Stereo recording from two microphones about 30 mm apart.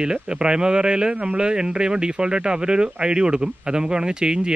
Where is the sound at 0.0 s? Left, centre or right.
Right.